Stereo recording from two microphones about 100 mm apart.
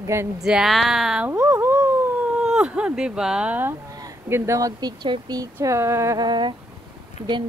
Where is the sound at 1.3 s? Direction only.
25° right (ahead or behind).